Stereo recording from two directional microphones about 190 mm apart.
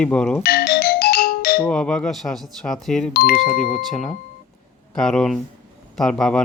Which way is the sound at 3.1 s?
55° left (ahead or behind).